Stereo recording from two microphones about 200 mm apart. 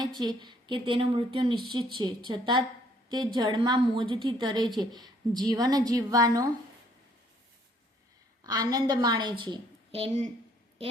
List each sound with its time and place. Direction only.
0.0 s a woman's voice: 20° right (ahead or behind)
8.4 s a woman's voice: 20° right (ahead or behind)